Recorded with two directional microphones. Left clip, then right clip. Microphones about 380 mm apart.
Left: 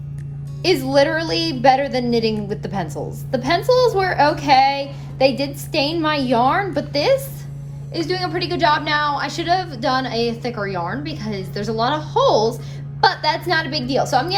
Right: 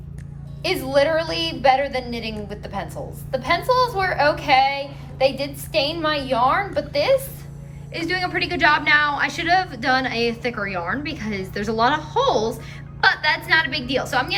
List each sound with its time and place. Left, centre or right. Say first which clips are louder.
0.6 s a woman's voice: left 3 dB; centre